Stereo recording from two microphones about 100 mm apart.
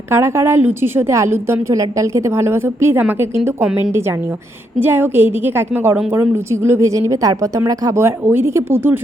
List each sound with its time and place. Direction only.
0.1 s a woman's voice: 25° right (ahead or behind)
4.8 s a woman's voice: 20° right (ahead or behind); by 8.0 s 35° right (ahead or behind)
8.0 s a woman's voice: 25° right (ahead or behind)